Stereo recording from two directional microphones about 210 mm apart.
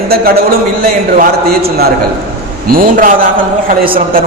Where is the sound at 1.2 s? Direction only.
45° right (ahead or behind).